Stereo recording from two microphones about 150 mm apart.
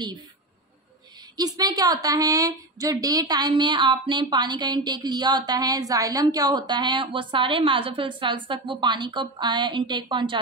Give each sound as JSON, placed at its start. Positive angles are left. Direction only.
{"t": 1.3, "sound": "a woman's voice", "side_deg": -25}